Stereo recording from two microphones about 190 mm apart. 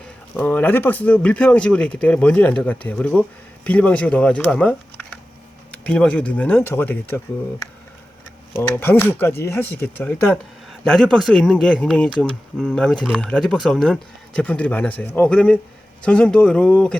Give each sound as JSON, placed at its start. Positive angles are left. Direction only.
{"t": 0.3, "sound": "speech", "side_deg": 10}
{"t": 8.5, "sound": "speech", "side_deg": 10}